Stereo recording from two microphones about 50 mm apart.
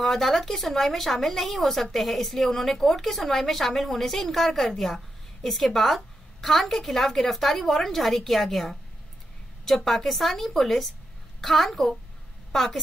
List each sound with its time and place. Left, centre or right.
0.0 s speech: centre